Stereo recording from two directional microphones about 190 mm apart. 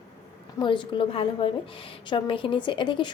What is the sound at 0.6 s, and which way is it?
Speech, 25° left (ahead or behind).